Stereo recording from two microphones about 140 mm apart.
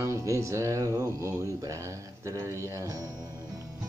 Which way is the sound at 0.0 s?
20° right (ahead or behind).